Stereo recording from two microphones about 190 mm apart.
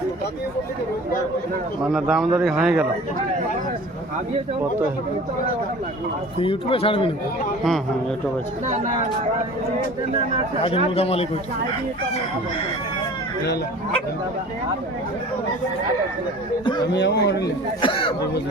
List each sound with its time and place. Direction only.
1.9 s a man's voice: centre (ahead or behind)
6.4 s speech: 30° left (ahead or behind)
8.6 s speech: 40° right (ahead or behind)
10.6 s a man's voice: 30° left (ahead or behind)
16.9 s speech: 65° left (ahead or behind)
17.7 s speech: 25° left (ahead or behind)